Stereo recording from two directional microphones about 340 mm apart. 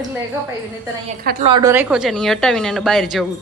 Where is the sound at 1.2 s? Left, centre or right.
Right.